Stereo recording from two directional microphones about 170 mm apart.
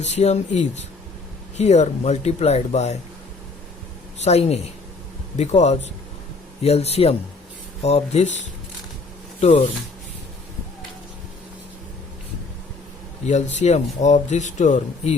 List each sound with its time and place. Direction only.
0.0 s speech: 40° left (ahead or behind)
4.2 s speech: 40° left (ahead or behind)
13.2 s speech: 45° left (ahead or behind)